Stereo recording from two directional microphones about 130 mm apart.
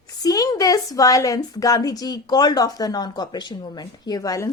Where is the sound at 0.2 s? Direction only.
30° left (ahead or behind).